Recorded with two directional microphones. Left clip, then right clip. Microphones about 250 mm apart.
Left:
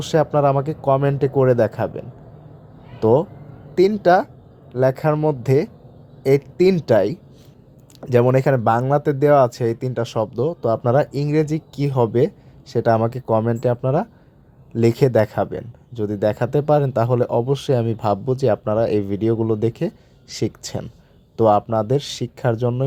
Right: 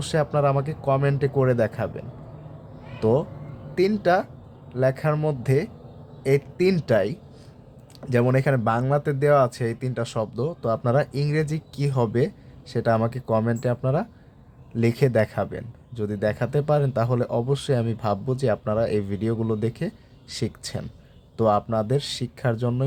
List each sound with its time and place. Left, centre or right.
0.0 s speech: centre